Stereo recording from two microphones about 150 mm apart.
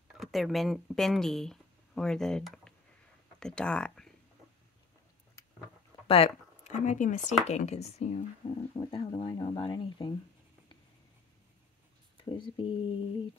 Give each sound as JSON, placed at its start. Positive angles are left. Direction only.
{"t": 0.2, "sound": "speech", "side_deg": 0}
{"t": 6.0, "sound": "speech", "side_deg": 40}
{"t": 8.5, "sound": "speech", "side_deg": 35}
{"t": 12.5, "sound": "speech", "side_deg": 30}